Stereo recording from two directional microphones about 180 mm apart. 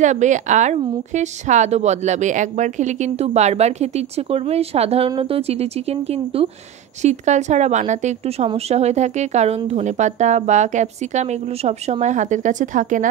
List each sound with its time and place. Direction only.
0.0 s a woman's voice: 40° right (ahead or behind)